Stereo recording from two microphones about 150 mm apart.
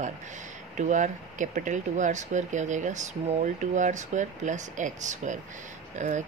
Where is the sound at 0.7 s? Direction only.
55° right (ahead or behind).